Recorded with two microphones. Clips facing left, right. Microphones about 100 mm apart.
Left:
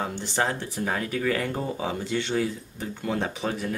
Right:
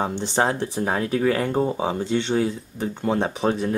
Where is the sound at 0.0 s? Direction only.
25° right (ahead or behind).